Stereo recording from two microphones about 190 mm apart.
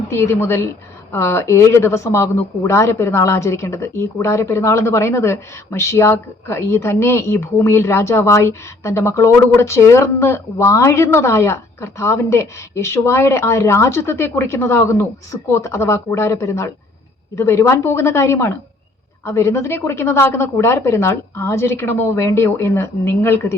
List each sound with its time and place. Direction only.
0.1 s a woman's voice: 15° left (ahead or behind)